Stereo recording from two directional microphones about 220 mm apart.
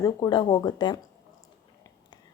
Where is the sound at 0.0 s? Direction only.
20° left (ahead or behind).